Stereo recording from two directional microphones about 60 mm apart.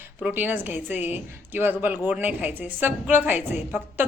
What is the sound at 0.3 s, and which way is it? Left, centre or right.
A woman's voice, right.